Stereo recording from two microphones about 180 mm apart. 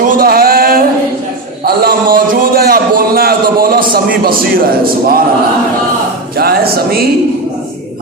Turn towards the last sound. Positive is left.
turn(degrees=-60)  # may be behind; listen again after turning